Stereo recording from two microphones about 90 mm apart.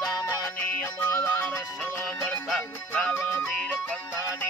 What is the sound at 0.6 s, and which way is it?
Music, 20° left (ahead or behind).